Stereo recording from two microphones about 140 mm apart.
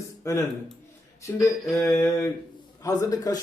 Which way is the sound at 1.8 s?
15° left (ahead or behind).